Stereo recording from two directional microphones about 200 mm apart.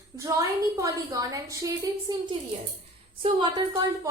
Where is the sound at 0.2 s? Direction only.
15° right (ahead or behind).